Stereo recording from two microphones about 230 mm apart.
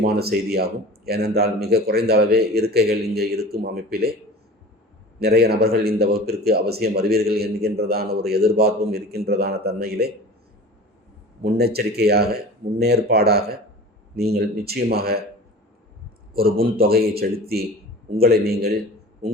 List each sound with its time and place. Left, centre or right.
0.0 s speech: right
5.2 s speech: right
11.4 s speech: right
16.6 s a man's voice: right